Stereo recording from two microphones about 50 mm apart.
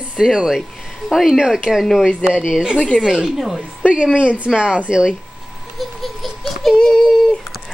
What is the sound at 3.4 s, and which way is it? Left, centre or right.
Speech, centre.